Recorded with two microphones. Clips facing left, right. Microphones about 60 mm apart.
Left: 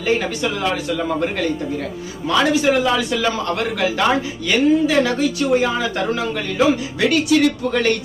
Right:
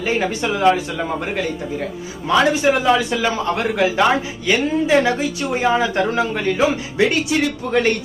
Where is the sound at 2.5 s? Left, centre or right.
Right.